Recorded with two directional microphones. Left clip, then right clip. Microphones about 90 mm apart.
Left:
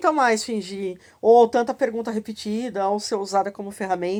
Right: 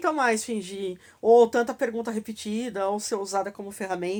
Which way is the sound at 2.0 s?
40° left (ahead or behind).